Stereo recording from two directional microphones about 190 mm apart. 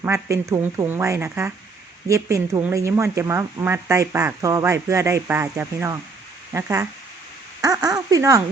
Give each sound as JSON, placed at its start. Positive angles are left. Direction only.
{"t": 0.0, "sound": "speech", "side_deg": -15}